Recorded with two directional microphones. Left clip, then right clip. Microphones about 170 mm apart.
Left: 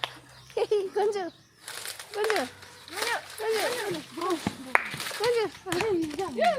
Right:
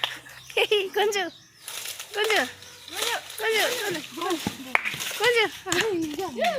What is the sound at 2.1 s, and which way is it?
Speech, 5° right (ahead or behind).